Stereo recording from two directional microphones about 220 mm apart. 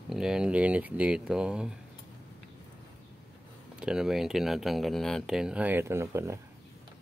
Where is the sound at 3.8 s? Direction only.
5° right (ahead or behind).